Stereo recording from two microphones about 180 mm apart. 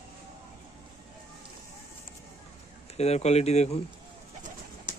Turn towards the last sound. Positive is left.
turn(degrees=35)  # may be behind; listen again after turning